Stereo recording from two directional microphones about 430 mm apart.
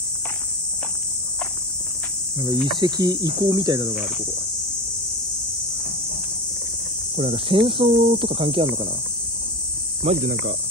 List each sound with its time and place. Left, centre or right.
2.4 s speech: centre
7.2 s speech: centre
10.0 s speech: centre